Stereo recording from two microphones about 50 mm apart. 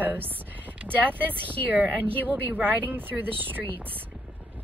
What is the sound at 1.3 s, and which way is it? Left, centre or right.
Speech, left.